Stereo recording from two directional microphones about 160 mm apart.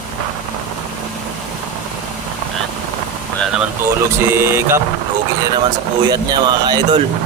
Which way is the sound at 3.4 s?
5° right (ahead or behind).